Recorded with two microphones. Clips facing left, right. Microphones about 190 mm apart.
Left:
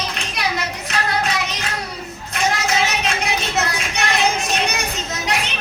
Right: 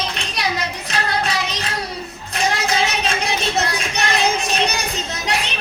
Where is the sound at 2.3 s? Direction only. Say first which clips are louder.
Even; 35° right (ahead or behind).